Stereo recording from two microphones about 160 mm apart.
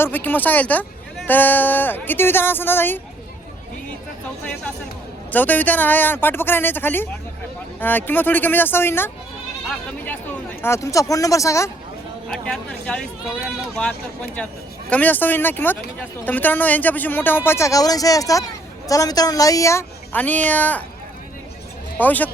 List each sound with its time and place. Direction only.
0.0 s a man's voice: 10° left (ahead or behind)
5.3 s a man's voice: 10° left (ahead or behind)
12.3 s a man's voice: 5° left (ahead or behind)
21.9 s a man's voice: 10° left (ahead or behind)